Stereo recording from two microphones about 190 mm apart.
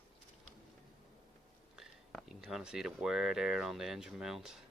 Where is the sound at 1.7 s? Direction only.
Centre (ahead or behind).